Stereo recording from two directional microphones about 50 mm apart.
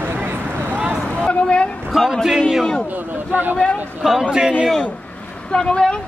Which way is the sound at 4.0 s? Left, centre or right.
Centre.